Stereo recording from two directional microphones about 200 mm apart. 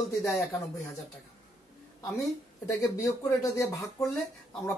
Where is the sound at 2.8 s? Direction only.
15° left (ahead or behind).